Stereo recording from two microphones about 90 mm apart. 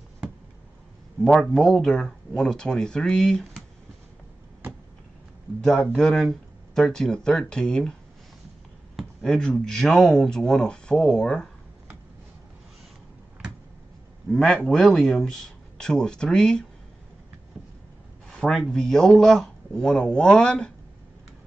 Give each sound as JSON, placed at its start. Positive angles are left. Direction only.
{"t": 1.2, "sound": "speech", "side_deg": 5}
{"t": 5.6, "sound": "speech", "side_deg": 10}
{"t": 8.9, "sound": "speech", "side_deg": 5}
{"t": 14.3, "sound": "speech", "side_deg": 10}
{"t": 18.3, "sound": "speech", "side_deg": 5}